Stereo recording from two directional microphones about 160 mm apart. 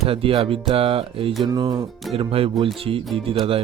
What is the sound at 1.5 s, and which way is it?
Speech, 25° right (ahead or behind).